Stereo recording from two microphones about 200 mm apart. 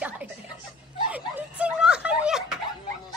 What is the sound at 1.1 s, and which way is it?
Snicker, 5° right (ahead or behind).